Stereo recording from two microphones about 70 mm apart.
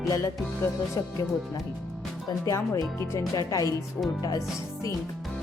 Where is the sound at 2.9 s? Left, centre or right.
Left.